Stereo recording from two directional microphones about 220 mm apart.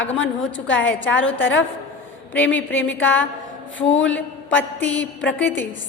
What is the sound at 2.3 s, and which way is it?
A woman's voice, 10° left (ahead or behind).